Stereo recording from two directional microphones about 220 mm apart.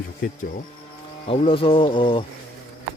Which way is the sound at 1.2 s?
25° left (ahead or behind).